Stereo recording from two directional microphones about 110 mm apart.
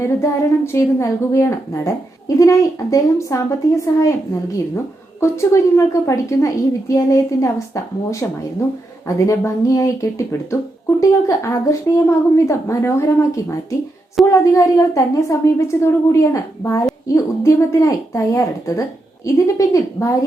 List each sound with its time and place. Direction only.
0.0 s a woman's voice: 25° left (ahead or behind)
9.0 s a woman's voice: 30° left (ahead or behind)